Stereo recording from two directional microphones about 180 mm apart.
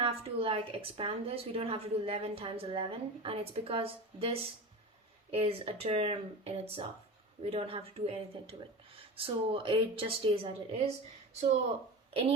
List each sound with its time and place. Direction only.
0.0 s a woman's voice: 30° right (ahead or behind)